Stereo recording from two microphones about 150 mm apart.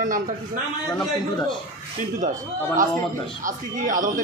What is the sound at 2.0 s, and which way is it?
A man's voice, 60° right (ahead or behind).